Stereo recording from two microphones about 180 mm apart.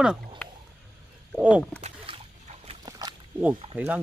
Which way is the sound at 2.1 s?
30° right (ahead or behind).